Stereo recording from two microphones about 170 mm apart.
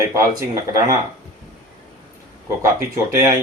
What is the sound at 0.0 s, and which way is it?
Speech, 20° right (ahead or behind).